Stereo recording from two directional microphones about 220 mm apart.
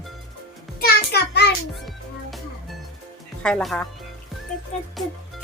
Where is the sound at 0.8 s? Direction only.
45° left (ahead or behind).